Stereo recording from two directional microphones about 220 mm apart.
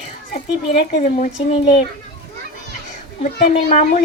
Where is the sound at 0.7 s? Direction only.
30° left (ahead or behind).